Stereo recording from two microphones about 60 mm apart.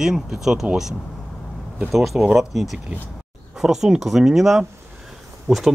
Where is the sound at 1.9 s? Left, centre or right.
Centre.